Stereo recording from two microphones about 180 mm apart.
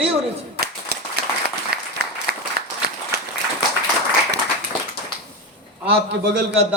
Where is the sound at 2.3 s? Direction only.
60° right (ahead or behind).